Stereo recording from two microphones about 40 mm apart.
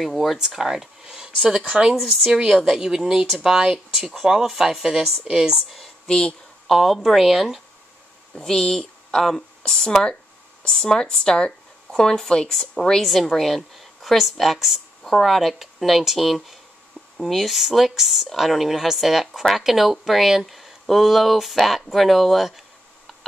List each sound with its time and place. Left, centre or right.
0.1 s speech: centre
0.4 s speech: centre
6.0 s speech: centre
6.7 s speech: centre
8.4 s speech: centre
11.9 s speech: centre
15.0 s speech: centre
15.3 s speech: centre